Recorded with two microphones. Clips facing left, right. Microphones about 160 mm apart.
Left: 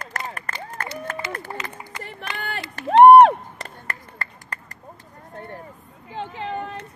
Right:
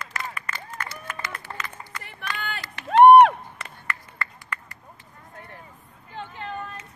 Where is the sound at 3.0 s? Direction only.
35° left (ahead or behind).